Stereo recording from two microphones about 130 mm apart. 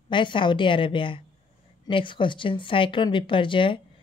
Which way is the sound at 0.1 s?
40° left (ahead or behind).